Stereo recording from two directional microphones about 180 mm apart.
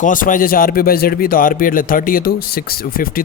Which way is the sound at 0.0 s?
45° left (ahead or behind).